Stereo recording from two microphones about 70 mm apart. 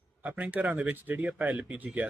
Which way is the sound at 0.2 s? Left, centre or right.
Right.